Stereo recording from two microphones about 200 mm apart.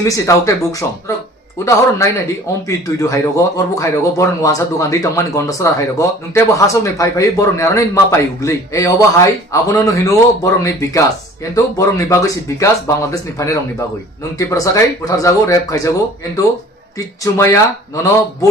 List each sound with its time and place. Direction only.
0.0 s speech: 15° left (ahead or behind)
17.3 s speech: 15° left (ahead or behind)